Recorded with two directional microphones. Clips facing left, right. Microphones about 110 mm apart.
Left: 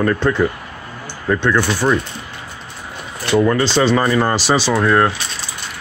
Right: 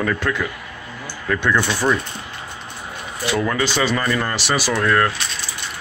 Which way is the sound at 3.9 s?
20° left (ahead or behind).